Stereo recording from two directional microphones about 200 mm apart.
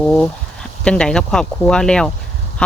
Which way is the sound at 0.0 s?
5° left (ahead or behind).